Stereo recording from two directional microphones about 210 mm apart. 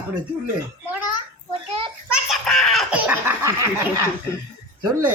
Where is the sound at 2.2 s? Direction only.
Centre (ahead or behind); by 4.0 s 15° right (ahead or behind).